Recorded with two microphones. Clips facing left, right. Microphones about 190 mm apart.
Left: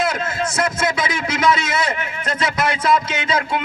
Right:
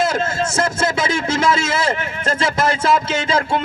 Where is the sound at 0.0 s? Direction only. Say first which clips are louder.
Right 2 dB; 25° right (ahead or behind).